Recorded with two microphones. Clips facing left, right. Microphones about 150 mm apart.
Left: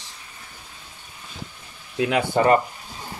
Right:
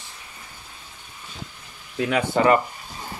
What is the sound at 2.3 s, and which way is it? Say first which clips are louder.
Speech: even; 35° left (ahead or behind).